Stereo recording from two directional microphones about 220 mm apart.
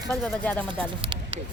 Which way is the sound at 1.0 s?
25° right (ahead or behind).